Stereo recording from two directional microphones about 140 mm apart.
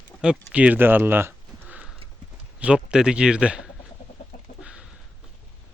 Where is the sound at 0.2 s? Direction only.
5° right (ahead or behind).